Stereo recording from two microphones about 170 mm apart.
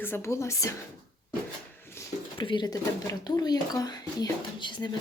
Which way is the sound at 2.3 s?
30° left (ahead or behind).